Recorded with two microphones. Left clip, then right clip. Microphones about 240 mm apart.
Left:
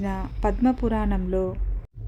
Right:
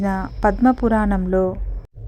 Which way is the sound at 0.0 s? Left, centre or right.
Right.